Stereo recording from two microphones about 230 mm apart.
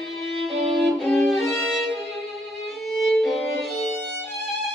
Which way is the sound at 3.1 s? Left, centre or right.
Centre.